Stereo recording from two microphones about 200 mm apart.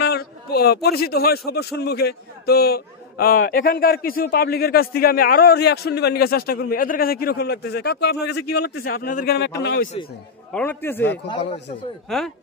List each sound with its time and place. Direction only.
0.0 s a man's voice: 50° left (ahead or behind)
10.5 s a man's voice: 10° left (ahead or behind)
11.2 s speech: 25° left (ahead or behind)